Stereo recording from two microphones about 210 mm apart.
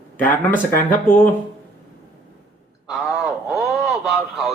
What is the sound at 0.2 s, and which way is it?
Speech, 40° left (ahead or behind).